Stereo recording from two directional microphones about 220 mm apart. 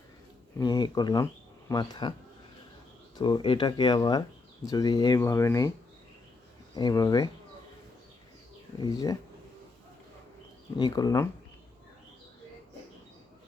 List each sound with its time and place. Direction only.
0.6 s speech: 15° left (ahead or behind)
3.2 s speech: 20° left (ahead or behind)
6.7 s speech: 15° left (ahead or behind)
8.8 s speech: 15° left (ahead or behind)
10.8 s speech: 20° left (ahead or behind)